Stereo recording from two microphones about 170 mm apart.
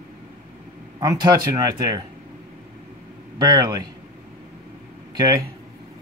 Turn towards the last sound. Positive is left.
turn(degrees=-25)  # may be behind; listen again after turning